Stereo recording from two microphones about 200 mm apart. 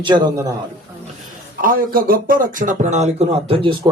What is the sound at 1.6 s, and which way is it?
Speech, 45° right (ahead or behind).